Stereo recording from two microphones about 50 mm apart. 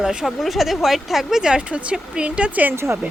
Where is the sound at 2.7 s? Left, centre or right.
Right.